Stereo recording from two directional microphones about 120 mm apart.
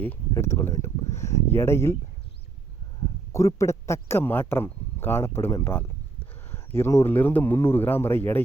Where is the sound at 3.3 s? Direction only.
25° left (ahead or behind).